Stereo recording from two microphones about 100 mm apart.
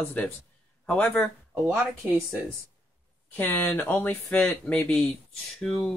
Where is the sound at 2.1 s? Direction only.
20° right (ahead or behind).